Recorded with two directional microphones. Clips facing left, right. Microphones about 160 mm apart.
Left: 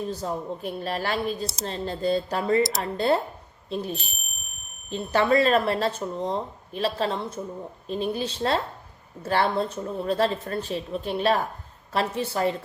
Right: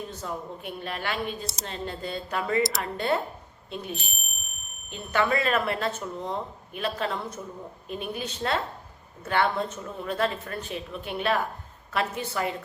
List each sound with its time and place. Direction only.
0.1 s speech: 35° left (ahead or behind)